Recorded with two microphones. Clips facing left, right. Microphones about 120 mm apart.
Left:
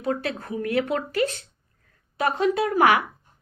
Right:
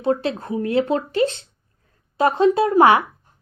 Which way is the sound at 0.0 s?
25° right (ahead or behind).